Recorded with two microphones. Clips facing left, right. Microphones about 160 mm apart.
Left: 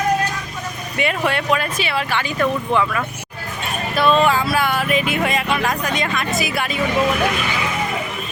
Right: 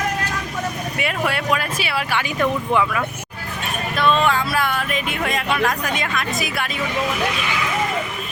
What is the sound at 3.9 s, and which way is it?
Speech, 5° left (ahead or behind).